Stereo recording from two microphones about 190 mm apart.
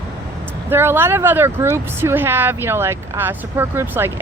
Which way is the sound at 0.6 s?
10° right (ahead or behind).